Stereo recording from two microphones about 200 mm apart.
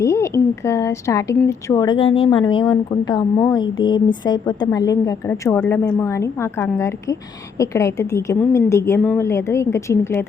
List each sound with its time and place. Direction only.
0.0 s a woman's voice: 15° left (ahead or behind)